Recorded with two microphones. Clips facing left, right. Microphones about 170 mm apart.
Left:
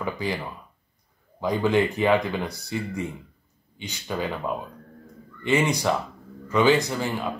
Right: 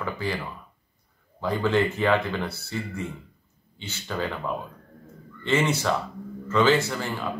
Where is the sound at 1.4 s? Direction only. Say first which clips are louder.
Left 2 dB; 15° left (ahead or behind).